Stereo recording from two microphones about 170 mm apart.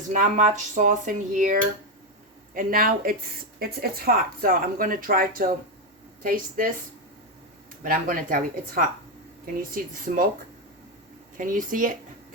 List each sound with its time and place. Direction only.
0.1 s speech: 45° right (ahead or behind)
2.6 s speech: 55° right (ahead or behind)
7.9 s speech: 55° right (ahead or behind)
11.3 s speech: 50° right (ahead or behind)